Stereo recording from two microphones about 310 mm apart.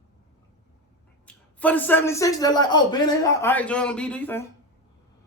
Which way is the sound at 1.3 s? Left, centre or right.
Centre.